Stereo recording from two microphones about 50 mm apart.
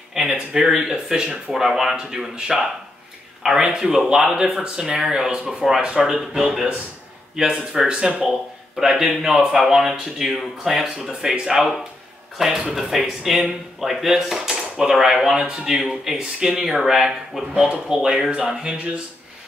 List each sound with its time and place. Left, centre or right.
0.1 s a sound: centre
0.7 s speech: centre
5.4 s speech: centre
7.3 s speech: centre
17.6 s speech: centre
18.3 s speech: centre